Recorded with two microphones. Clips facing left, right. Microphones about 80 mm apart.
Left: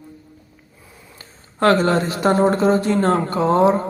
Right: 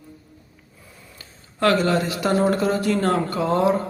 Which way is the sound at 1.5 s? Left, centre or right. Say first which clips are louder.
Left 3 dB; left.